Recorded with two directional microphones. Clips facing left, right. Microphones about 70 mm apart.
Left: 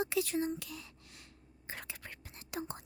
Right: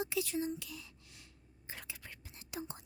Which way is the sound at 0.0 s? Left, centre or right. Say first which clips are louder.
Left 3 dB; left.